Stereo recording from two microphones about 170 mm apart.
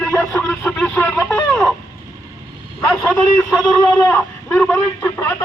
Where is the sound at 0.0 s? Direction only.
10° left (ahead or behind).